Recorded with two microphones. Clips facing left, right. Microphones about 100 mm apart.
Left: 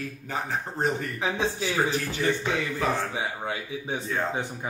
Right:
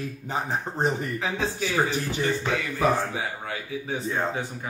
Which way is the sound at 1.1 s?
20° left (ahead or behind).